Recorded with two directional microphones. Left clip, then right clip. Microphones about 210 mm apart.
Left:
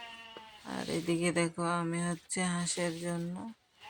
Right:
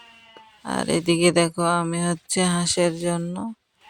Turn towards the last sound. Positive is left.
turn(degrees=-45)  # may be behind; listen again after turning